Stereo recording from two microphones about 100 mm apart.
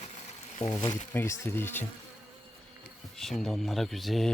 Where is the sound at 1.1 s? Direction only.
25° left (ahead or behind).